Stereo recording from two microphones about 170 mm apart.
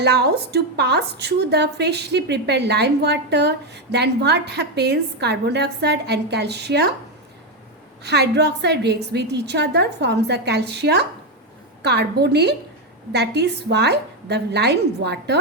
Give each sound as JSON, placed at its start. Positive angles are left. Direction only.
{"t": 0.0, "sound": "a woman's voice", "side_deg": -75}
{"t": 8.0, "sound": "a woman's voice", "side_deg": -75}